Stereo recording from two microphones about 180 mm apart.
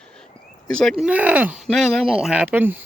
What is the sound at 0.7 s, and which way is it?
Speech, 5° left (ahead or behind).